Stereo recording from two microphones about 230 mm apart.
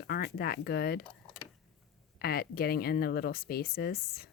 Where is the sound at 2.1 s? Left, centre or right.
Left.